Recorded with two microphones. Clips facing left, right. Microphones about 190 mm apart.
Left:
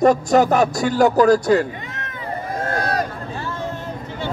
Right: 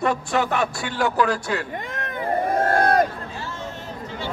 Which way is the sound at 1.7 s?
50° right (ahead or behind).